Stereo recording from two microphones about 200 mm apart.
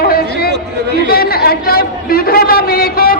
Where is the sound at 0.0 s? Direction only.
50° left (ahead or behind).